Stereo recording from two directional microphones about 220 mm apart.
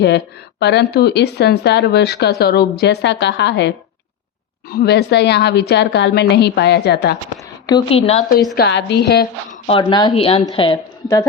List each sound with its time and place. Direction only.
0.6 s a woman's voice: 50° left (ahead or behind)
7.4 s a woman's voice: 20° left (ahead or behind)
8.5 s a woman's voice: 50° left (ahead or behind)
9.6 s a woman's voice: 20° left (ahead or behind)